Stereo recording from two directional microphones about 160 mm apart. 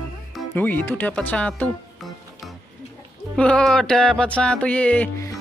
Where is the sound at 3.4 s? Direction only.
5° left (ahead or behind).